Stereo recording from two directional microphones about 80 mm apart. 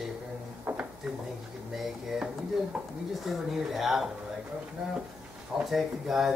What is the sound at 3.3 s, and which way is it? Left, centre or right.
Speech, centre.